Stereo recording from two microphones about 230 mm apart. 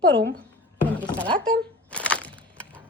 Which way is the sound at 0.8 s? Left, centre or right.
Centre.